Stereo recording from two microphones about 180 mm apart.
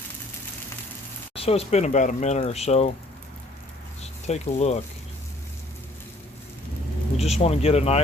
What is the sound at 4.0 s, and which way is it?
Speech, 40° left (ahead or behind).